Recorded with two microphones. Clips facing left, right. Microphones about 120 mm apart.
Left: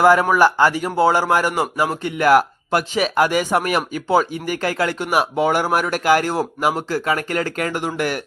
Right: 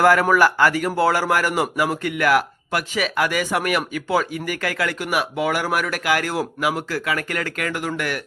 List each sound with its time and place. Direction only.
0.0 s speech: 20° left (ahead or behind)